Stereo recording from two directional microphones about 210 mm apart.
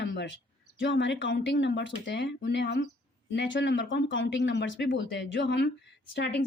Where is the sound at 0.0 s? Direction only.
60° left (ahead or behind).